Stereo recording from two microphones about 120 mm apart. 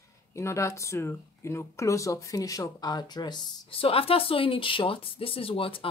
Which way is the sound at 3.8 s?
55° left (ahead or behind).